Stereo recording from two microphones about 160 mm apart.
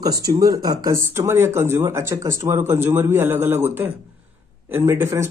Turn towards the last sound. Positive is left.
turn(degrees=-15)  # may be behind; listen again after turning